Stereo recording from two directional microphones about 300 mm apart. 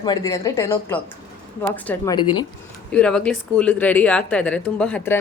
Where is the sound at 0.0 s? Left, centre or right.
Centre.